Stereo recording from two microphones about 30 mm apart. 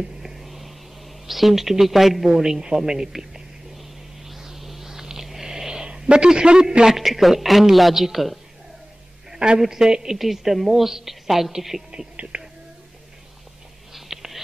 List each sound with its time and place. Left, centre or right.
0.4 s a sound: centre
1.2 s speech: centre
2.2 s a woman's voice: centre
2.6 s a sound: centre
6.0 s a man's voice: right
7.0 s speech: centre
9.6 s a woman's voice: centre
10.1 s speech: centre
11.7 s speech: right
12.2 s speech: right
13.9 s whispering: centre